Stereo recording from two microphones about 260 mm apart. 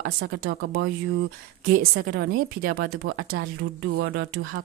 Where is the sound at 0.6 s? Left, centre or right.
Right.